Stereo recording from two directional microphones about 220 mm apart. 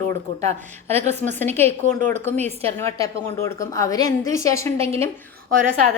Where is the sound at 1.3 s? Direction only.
10° left (ahead or behind).